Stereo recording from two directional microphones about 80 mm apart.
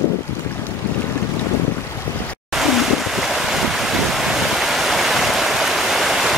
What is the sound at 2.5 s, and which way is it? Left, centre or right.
Ocean, centre.